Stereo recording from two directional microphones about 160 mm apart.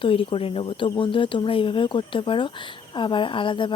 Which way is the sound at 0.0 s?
35° left (ahead or behind).